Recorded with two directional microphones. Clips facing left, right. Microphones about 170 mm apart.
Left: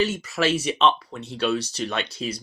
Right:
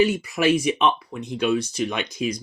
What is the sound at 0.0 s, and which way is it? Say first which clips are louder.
Speech: right 4 dB; 15° right (ahead or behind).